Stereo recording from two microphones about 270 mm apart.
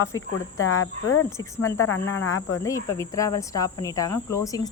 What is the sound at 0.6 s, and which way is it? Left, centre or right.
Speech, left.